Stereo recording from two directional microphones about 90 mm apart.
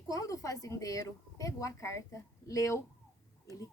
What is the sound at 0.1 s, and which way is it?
A woman's voice, 40° left (ahead or behind).